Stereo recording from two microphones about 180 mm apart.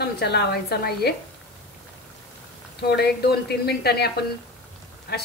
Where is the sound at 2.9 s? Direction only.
65° left (ahead or behind).